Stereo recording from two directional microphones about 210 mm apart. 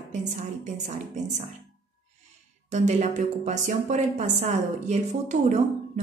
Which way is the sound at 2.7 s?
35° right (ahead or behind).